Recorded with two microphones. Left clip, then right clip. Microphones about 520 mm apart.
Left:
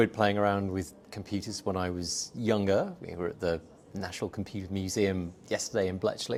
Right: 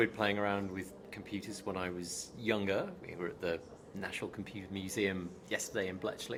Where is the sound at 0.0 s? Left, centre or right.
Left.